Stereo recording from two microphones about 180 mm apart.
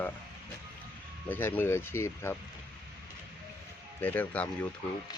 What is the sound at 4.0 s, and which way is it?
Speech, 10° left (ahead or behind).